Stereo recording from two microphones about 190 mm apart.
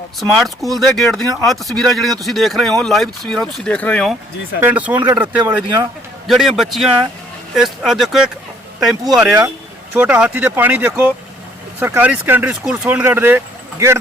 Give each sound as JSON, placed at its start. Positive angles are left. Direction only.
{"t": 0.2, "sound": "speech", "side_deg": 0}
{"t": 4.6, "sound": "speech", "side_deg": -10}
{"t": 5.4, "sound": "speech", "side_deg": -20}
{"t": 6.2, "sound": "speech", "side_deg": 0}